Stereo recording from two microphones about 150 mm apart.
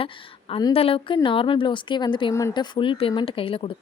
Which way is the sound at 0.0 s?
35° left (ahead or behind).